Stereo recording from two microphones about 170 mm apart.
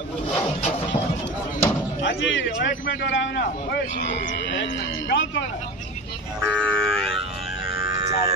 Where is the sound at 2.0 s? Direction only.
90° left.